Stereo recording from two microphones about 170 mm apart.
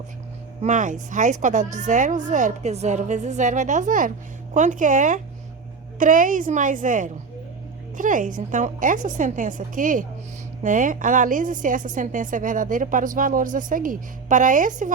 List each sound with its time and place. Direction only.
0.6 s a woman's voice: 50° right (ahead or behind)